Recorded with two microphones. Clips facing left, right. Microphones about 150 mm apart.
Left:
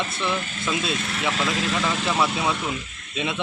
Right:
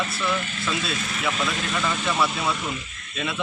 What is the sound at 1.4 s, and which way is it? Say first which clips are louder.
Speech: left 3 dB; 90° left.